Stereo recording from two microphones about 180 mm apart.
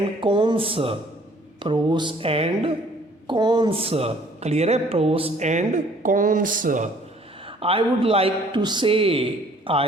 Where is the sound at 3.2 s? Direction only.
25° right (ahead or behind); by 6.8 s 50° right (ahead or behind).